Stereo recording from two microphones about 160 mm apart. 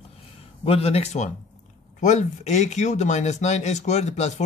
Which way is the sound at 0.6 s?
40° left (ahead or behind).